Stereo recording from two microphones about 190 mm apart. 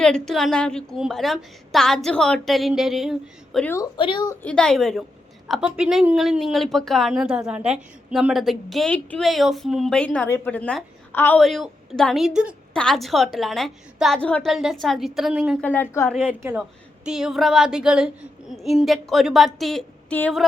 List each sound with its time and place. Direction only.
0.0 s speech: 5° left (ahead or behind)
3.7 s a woman's voice: 20° left (ahead or behind)
4.4 s speech: 5° left (ahead or behind)
15.6 s a woman's voice: 10° left (ahead or behind)
16.4 s speech: 5° right (ahead or behind)